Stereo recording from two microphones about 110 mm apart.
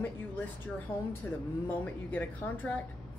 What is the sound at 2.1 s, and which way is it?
Speech, 15° left (ahead or behind).